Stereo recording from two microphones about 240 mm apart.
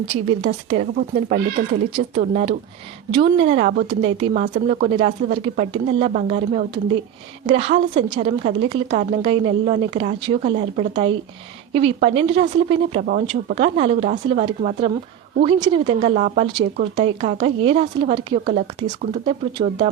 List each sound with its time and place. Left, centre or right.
0.3 s a woman's voice: right
13.0 s a woman's voice: right